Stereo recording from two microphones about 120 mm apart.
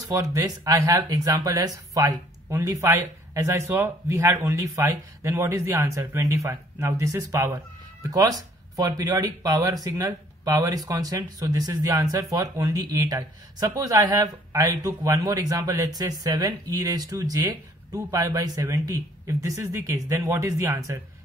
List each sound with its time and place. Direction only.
0.0 s speech: 30° right (ahead or behind)